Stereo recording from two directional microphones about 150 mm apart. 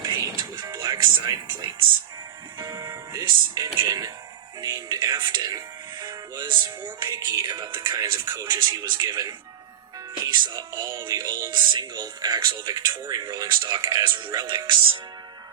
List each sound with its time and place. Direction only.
0.0 s music: 30° right (ahead or behind)
2.6 s speech: 25° right (ahead or behind)